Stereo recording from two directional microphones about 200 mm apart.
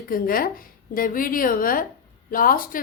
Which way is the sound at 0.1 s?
45° left (ahead or behind).